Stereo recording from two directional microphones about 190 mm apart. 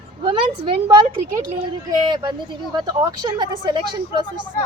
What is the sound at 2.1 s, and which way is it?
A woman's voice, 20° right (ahead or behind).